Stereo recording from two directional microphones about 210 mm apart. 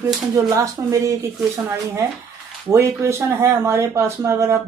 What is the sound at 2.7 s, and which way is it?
Speech, 15° right (ahead or behind).